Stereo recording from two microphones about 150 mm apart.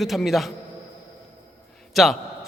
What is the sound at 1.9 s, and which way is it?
Speech, centre (ahead or behind).